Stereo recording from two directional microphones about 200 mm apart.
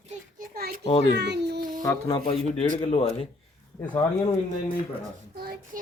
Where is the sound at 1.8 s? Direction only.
20° left (ahead or behind).